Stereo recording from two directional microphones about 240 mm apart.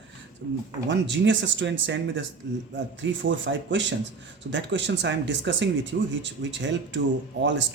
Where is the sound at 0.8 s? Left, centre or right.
Right.